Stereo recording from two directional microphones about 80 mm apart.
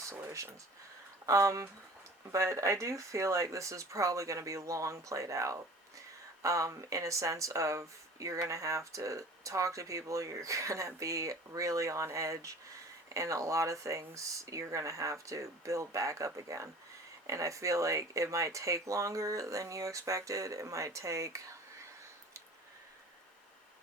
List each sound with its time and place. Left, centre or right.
0.1 s speech: right